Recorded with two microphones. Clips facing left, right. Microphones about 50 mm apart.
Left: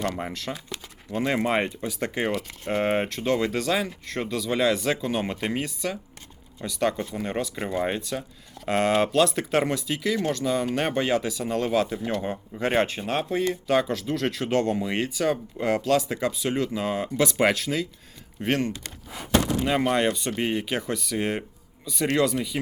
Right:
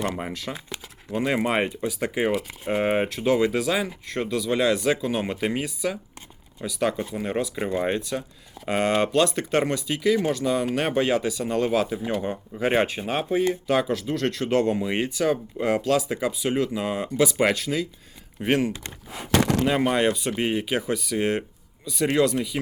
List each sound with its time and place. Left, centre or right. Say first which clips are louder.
0.1 s speech: right 1 dB; centre
19.3 s speech: right 2 dB; right
19.6 s speech: right 1 dB; centre